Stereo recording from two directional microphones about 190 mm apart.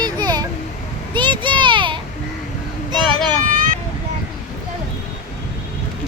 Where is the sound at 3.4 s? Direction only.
45° right (ahead or behind).